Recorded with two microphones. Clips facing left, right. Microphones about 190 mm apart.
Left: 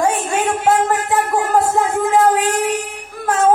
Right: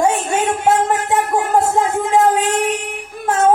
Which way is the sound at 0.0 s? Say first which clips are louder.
Right 1 dB; 25° right (ahead or behind).